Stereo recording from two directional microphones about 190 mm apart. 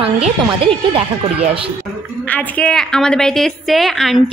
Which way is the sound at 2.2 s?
10° left (ahead or behind).